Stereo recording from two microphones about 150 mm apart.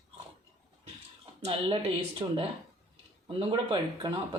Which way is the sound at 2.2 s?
35° right (ahead or behind).